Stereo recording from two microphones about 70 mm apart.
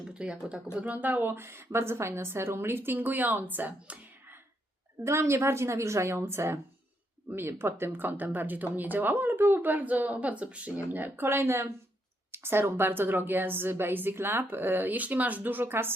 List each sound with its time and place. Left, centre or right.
0.0 s speech: centre
5.0 s speech: right
7.9 s speech: right
10.9 s speech: right